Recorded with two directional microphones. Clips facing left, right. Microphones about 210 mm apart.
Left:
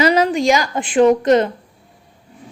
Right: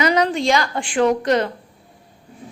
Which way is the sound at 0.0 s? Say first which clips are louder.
Left 3 dB; 25° left (ahead or behind).